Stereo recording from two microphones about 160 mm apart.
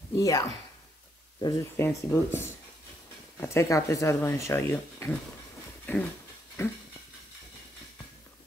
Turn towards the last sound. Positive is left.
turn(degrees=15)  # may be behind; listen again after turning